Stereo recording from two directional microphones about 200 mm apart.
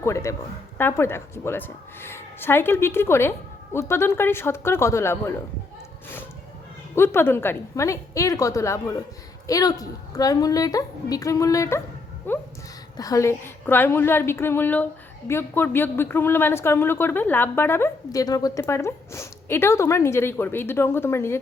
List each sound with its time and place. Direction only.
0.0 s speech: 15° left (ahead or behind)
6.9 s speech: 10° left (ahead or behind)